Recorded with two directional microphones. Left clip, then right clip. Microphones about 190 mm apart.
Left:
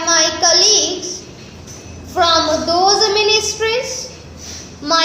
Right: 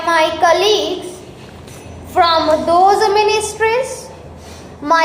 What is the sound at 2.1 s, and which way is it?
Speech, centre (ahead or behind).